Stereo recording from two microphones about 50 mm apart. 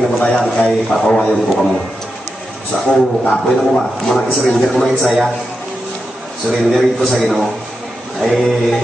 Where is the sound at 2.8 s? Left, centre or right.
Centre.